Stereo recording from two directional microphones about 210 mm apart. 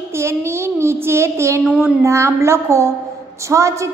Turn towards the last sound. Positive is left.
turn(degrees=-15)  # may be behind; listen again after turning